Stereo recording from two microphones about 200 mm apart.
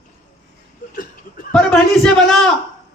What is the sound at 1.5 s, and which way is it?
Speech, 5° left (ahead or behind).